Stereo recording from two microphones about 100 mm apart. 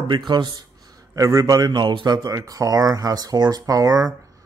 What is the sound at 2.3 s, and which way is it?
Speech, 35° right (ahead or behind).